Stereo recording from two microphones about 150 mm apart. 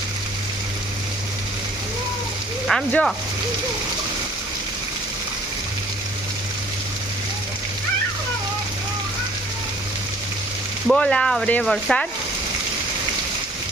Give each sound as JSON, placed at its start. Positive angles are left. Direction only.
{"t": 2.6, "sound": "speech", "side_deg": 5}
{"t": 10.8, "sound": "speech", "side_deg": 5}